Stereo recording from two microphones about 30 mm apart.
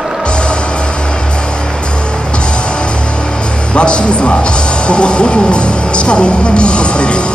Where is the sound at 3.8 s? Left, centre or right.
Left.